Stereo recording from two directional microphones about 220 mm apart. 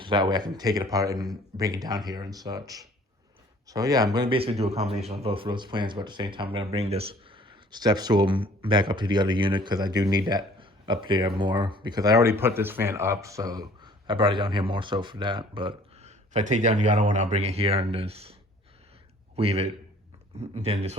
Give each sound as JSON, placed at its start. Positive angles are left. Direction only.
{"t": 0.0, "sound": "speech", "side_deg": -20}
{"t": 19.4, "sound": "speech", "side_deg": -25}